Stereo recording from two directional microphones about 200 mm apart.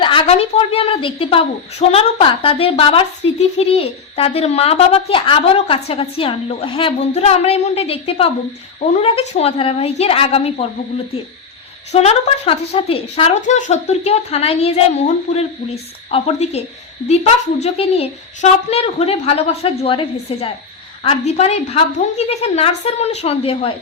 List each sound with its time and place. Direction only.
0.0 s a woman's voice: 25° left (ahead or behind)
11.9 s speech: 30° left (ahead or behind)